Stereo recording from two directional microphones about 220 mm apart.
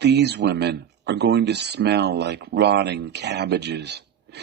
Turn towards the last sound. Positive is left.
turn(degrees=-50)  # may be behind; listen again after turning